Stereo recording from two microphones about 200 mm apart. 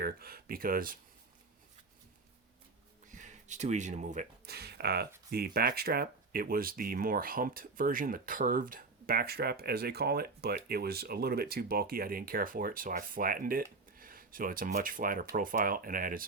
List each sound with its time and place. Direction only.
0.0 s speech: 50° right (ahead or behind)
3.1 s speech: 40° right (ahead or behind)
4.4 s speech: 55° right (ahead or behind)